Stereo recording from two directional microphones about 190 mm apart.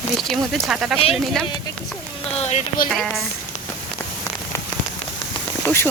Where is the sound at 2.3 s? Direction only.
35° left (ahead or behind).